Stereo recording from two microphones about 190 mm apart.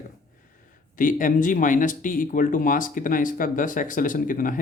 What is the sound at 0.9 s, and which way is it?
Speech, 45° left (ahead or behind).